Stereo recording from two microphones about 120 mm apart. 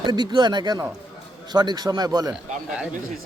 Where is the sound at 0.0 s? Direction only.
40° right (ahead or behind).